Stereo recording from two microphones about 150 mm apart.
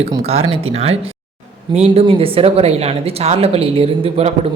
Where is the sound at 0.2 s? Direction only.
45° right (ahead or behind).